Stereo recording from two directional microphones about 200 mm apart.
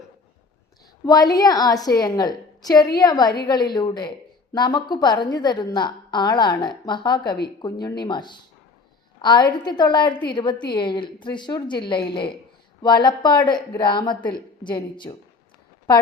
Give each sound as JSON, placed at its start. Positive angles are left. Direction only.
{"t": 1.0, "sound": "a woman's voice", "side_deg": 20}